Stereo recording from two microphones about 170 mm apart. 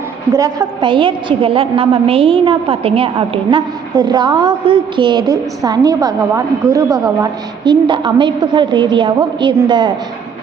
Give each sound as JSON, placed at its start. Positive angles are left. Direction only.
{"t": 0.3, "sound": "a woman's voice", "side_deg": -25}